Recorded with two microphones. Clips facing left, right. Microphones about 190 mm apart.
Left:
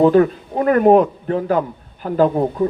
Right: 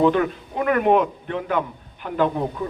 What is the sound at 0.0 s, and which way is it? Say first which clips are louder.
A man's voice: left 6 dB; 40° left (ahead or behind).